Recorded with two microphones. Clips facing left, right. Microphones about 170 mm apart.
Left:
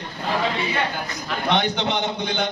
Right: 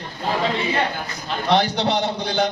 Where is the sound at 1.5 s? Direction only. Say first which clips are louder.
Right 3 dB; 35° right (ahead or behind).